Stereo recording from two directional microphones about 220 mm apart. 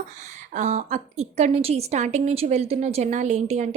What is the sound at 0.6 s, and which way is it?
A woman's voice, 30° right (ahead or behind).